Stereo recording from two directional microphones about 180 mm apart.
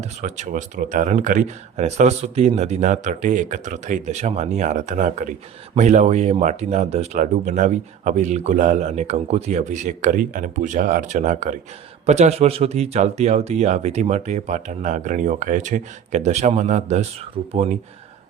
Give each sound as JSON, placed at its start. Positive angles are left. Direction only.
{"t": 0.0, "sound": "speech", "side_deg": -40}
{"t": 17.4, "sound": "speech", "side_deg": -30}